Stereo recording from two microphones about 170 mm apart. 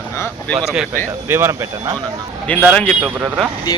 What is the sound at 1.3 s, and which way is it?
Speech, 15° right (ahead or behind).